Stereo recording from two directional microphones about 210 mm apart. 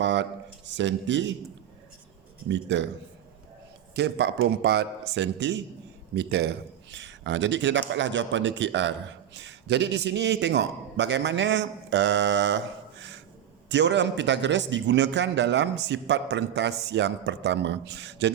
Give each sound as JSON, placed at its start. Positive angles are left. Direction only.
{"t": 0.0, "sound": "speech", "side_deg": -60}
{"t": 2.5, "sound": "speech", "side_deg": -60}
{"t": 3.9, "sound": "a man's voice", "side_deg": -55}